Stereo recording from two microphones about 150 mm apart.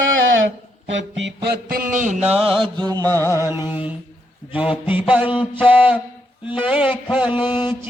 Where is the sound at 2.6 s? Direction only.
30° right (ahead or behind).